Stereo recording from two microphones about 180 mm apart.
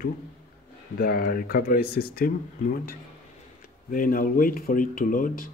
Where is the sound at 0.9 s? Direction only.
55° left (ahead or behind).